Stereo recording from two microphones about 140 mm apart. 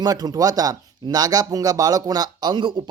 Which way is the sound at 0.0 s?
30° right (ahead or behind).